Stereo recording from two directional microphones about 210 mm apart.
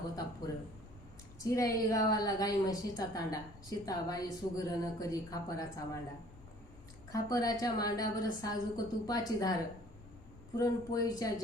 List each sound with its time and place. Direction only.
1.5 s a woman's voice: 15° left (ahead or behind)
7.1 s a woman's voice: 15° left (ahead or behind)